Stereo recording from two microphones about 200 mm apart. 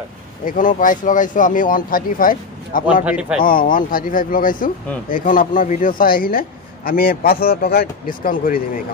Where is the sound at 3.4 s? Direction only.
45° left (ahead or behind).